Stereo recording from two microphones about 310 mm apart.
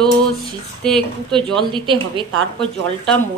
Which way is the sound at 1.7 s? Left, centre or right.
Centre.